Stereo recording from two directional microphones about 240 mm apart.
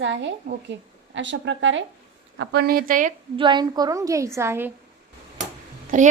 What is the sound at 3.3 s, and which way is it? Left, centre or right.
A woman's voice, centre.